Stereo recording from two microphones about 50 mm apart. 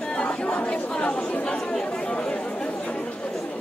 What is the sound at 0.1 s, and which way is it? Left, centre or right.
Chatter, left.